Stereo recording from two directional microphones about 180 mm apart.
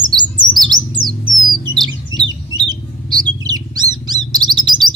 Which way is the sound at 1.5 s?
25° right (ahead or behind).